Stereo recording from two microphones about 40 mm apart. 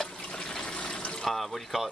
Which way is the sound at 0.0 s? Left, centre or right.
Centre.